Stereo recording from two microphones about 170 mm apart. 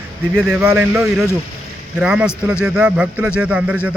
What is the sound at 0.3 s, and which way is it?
A man's voice, 10° right (ahead or behind).